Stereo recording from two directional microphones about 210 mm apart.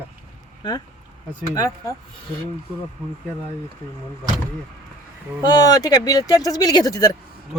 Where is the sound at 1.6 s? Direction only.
15° left (ahead or behind).